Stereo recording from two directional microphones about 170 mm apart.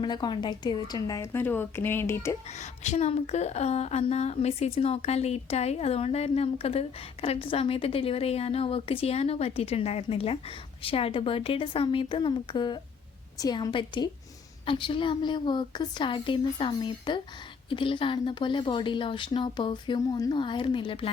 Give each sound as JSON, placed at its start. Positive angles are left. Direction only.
{"t": 0.0, "sound": "speech", "side_deg": 25}
{"t": 2.6, "sound": "a woman's voice", "side_deg": 45}